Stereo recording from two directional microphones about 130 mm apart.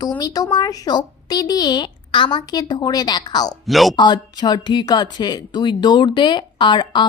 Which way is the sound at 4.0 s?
35° left (ahead or behind).